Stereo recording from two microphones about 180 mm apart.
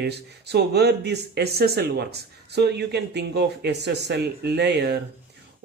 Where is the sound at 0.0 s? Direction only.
65° right (ahead or behind).